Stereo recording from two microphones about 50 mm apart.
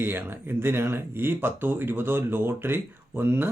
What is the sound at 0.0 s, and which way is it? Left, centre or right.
Speech, right.